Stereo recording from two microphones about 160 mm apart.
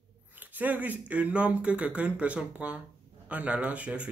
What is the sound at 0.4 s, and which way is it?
Speech, 10° right (ahead or behind).